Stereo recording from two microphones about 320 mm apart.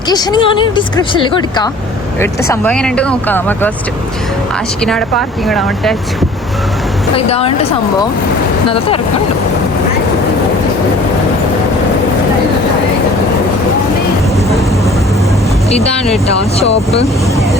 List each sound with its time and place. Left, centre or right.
0.1 s speech: centre
4.8 s speech: centre
7.2 s speech: centre
16.6 s speech: centre